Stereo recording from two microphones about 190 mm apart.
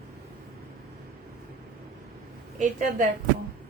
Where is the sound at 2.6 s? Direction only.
45° right (ahead or behind).